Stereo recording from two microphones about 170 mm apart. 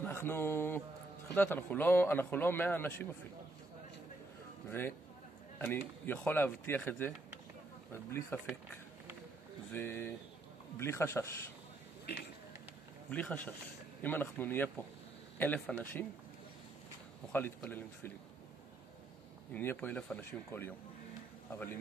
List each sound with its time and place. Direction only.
0.0 s a man's voice: 15° left (ahead or behind)
4.6 s a man's voice: 15° left (ahead or behind)
9.7 s a man's voice: 10° left (ahead or behind)
13.1 s a man's voice: 10° left (ahead or behind)
17.6 s a man's voice: 10° left (ahead or behind)
19.5 s a man's voice: 10° left (ahead or behind)